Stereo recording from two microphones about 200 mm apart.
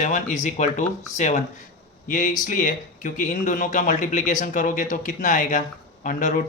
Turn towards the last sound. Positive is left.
turn(degrees=40)  # may be behind; listen again after turning